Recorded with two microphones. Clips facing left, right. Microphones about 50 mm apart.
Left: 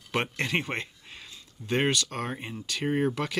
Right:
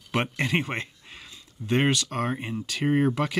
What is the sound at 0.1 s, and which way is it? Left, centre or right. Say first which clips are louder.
Speech: right 2 dB; centre.